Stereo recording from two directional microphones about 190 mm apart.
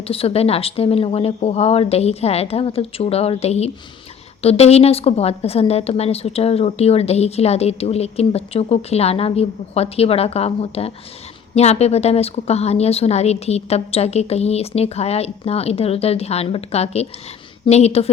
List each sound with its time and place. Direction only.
0.1 s a woman's voice: 30° left (ahead or behind)